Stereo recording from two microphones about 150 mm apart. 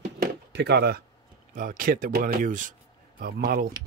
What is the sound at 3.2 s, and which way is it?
Speech, 90° right.